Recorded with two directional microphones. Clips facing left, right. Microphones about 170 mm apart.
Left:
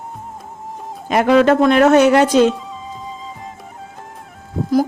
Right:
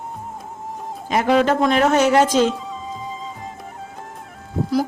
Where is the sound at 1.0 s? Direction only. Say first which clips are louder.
Left 5 dB; 65° left (ahead or behind).